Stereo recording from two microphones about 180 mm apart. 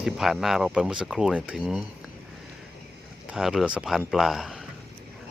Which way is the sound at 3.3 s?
Centre (ahead or behind).